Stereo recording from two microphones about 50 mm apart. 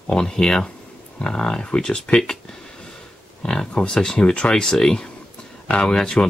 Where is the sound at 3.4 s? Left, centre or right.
Centre.